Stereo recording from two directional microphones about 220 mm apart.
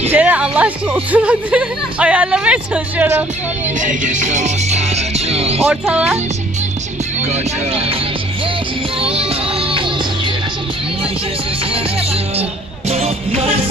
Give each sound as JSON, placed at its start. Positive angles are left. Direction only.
{"t": 0.1, "sound": "speech", "side_deg": -5}
{"t": 3.8, "sound": "music", "side_deg": -35}
{"t": 5.7, "sound": "speech", "side_deg": -5}
{"t": 7.2, "sound": "speech", "side_deg": -30}
{"t": 9.0, "sound": "music", "side_deg": -25}
{"t": 12.9, "sound": "music", "side_deg": -30}